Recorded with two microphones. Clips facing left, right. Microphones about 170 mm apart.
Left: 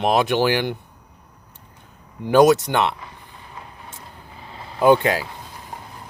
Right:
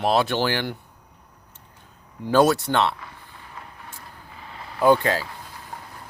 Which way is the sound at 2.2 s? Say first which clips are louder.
Left 4 dB; 15° left (ahead or behind).